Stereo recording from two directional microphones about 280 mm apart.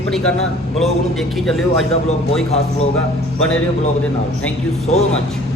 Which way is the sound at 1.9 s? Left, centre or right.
Left.